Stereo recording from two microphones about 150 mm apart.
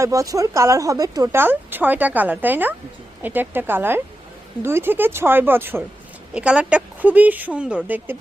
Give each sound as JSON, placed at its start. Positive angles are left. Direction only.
{"t": 0.0, "sound": "speech", "side_deg": -20}